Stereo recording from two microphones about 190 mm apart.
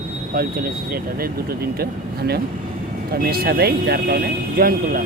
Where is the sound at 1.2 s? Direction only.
55° right (ahead or behind).